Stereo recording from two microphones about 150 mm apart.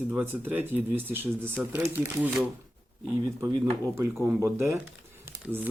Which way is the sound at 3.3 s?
15° right (ahead or behind).